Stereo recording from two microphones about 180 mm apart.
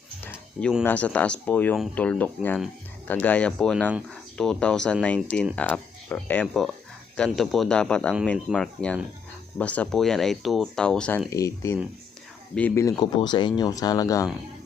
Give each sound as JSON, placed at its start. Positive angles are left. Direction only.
{"t": 0.2, "sound": "a sound", "side_deg": 10}
{"t": 0.9, "sound": "speech", "side_deg": 10}
{"t": 11.3, "sound": "speech", "side_deg": 15}